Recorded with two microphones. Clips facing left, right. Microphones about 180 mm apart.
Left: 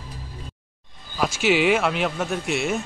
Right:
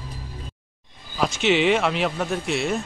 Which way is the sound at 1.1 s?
5° left (ahead or behind).